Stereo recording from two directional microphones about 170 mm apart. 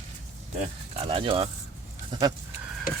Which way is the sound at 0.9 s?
35° right (ahead or behind).